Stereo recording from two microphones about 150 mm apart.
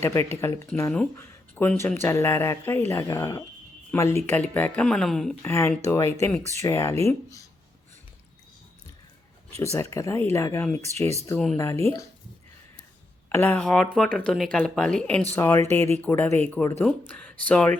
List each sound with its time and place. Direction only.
0.0 s speech: 15° left (ahead or behind)
5.4 s speech: 15° left (ahead or behind)
9.7 s speech: 20° left (ahead or behind)
10.9 s speech: 20° right (ahead or behind)
11.5 s speech: 20° left (ahead or behind)
13.3 s speech: 10° left (ahead or behind)